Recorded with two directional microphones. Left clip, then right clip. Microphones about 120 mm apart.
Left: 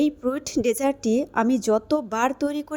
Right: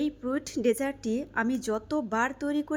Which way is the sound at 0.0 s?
40° left (ahead or behind).